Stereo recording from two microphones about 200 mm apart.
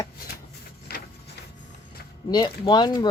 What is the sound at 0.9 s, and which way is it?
Printer, 50° left (ahead or behind).